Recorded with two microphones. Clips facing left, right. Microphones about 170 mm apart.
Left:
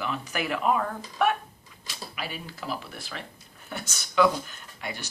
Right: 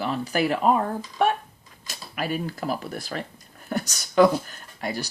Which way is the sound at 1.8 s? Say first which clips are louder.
Right 6 dB; 45° right (ahead or behind).